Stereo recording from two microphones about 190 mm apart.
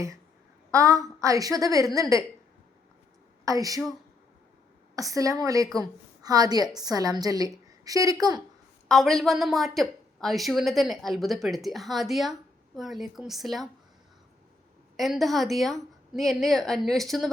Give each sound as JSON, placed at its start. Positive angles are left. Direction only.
{"t": 0.7, "sound": "a woman's voice", "side_deg": -15}
{"t": 3.4, "sound": "a woman's voice", "side_deg": -20}
{"t": 4.9, "sound": "a woman's voice", "side_deg": -15}
{"t": 8.9, "sound": "a woman's voice", "side_deg": 0}
{"t": 14.9, "sound": "a woman's voice", "side_deg": 0}